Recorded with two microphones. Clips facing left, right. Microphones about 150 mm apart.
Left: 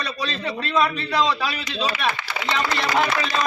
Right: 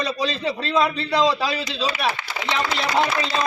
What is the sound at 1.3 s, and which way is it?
Speech, 35° right (ahead or behind).